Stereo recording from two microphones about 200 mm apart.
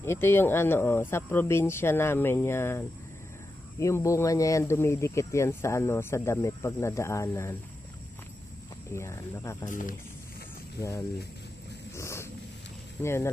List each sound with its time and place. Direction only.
0.0 s speech: 10° left (ahead or behind)
8.9 s speech: 15° left (ahead or behind)
9.6 s speech: 40° left (ahead or behind)
10.8 s speech: 15° left (ahead or behind)
11.9 s wild animals: 15° left (ahead or behind)
13.0 s speech: 15° left (ahead or behind)